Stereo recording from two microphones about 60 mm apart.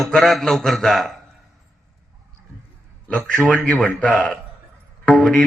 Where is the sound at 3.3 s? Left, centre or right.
Centre.